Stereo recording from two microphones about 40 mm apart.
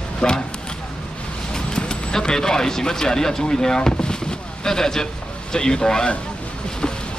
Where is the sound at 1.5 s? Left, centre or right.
Centre.